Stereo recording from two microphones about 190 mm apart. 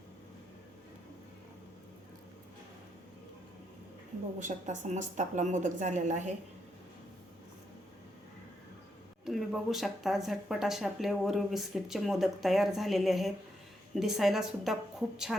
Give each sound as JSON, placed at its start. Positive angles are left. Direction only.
{"t": 4.4, "sound": "a woman's voice", "side_deg": -40}
{"t": 9.2, "sound": "speech", "side_deg": 0}